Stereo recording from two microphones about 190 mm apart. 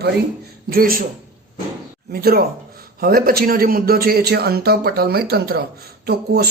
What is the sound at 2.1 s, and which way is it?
A man's voice, 55° right (ahead or behind).